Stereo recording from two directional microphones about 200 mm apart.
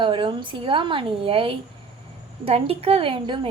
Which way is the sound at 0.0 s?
25° right (ahead or behind).